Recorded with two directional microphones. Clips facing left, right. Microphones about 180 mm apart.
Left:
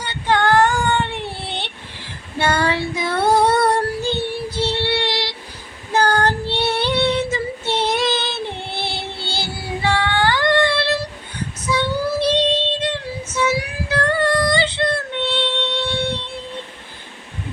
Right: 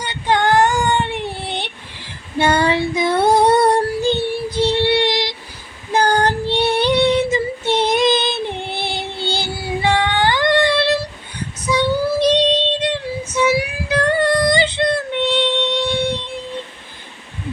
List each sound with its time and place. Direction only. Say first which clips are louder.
0.0 s child singing: right 1 dB; 15° right (ahead or behind)